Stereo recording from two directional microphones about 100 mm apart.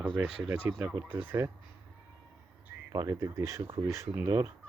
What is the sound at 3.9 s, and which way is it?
Speech, 30° right (ahead or behind).